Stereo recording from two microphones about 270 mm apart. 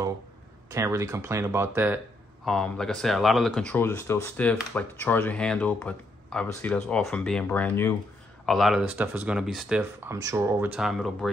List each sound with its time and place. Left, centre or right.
0.7 s speech: centre